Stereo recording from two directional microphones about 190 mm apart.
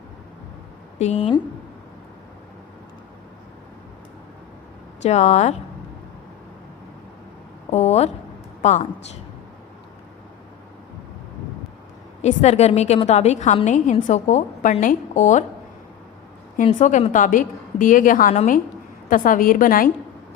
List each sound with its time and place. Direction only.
0.9 s a woman's voice: 35° left (ahead or behind)
5.0 s a woman's voice: 35° left (ahead or behind)
7.7 s a woman's voice: 35° left (ahead or behind)
12.2 s a woman's voice: 35° left (ahead or behind)
16.6 s a woman's voice: 40° left (ahead or behind)